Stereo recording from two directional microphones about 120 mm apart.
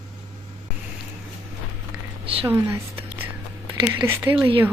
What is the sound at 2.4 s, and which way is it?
Speech, 20° right (ahead or behind).